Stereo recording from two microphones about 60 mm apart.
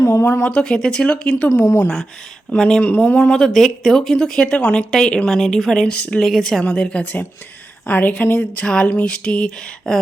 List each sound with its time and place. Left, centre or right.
0.0 s speech: left
0.4 s speech: centre
2.6 s speech: centre
2.8 s a woman's voice: left
3.3 s speech: centre
4.4 s speech: centre
5.8 s speech: centre
6.2 s speech: centre
6.7 s speech: centre
7.0 s a woman's voice: left; by 10.0 s centre